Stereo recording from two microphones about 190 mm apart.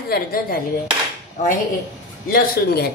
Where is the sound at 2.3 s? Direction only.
55° left (ahead or behind).